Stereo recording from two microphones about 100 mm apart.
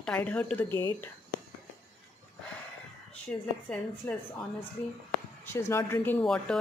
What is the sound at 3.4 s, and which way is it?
Speech, 15° left (ahead or behind).